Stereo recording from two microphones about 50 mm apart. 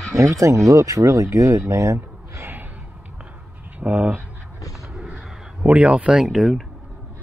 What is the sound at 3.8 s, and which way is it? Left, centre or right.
Speech, right.